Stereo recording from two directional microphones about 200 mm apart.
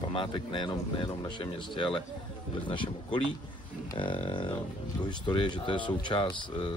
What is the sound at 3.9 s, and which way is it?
Speech, 25° left (ahead or behind).